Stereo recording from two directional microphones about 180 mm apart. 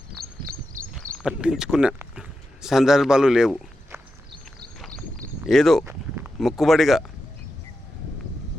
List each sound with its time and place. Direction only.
0.4 s walk: 55° right (ahead or behind)
1.2 s speech: 5° right (ahead or behind)
2.1 s a sound: 5° right (ahead or behind)
4.8 s walk: 5° left (ahead or behind)
5.5 s speech: centre (ahead or behind)
5.8 s speech: 10° right (ahead or behind)